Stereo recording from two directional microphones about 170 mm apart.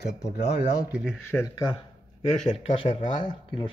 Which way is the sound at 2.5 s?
40° left (ahead or behind).